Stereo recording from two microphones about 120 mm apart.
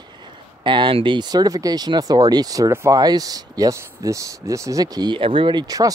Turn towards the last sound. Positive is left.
turn(degrees=-30)  # may be behind; listen again after turning